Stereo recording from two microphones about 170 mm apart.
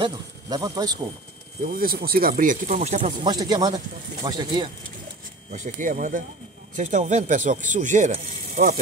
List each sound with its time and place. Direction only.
0.0 s speech: 20° right (ahead or behind)
1.6 s speech: 60° right (ahead or behind); by 3.1 s 40° right (ahead or behind)
3.1 s speech: 25° right (ahead or behind)
5.5 s speech: 50° right (ahead or behind)